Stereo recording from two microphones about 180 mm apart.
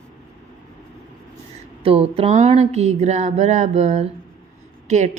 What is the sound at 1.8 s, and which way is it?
A woman's voice, 30° right (ahead or behind).